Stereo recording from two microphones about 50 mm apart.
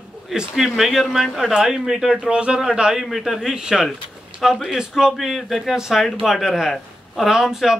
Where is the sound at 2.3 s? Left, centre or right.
Right.